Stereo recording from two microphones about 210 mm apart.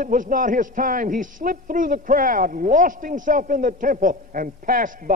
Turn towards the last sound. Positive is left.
turn(degrees=-40)  # may be behind; listen again after turning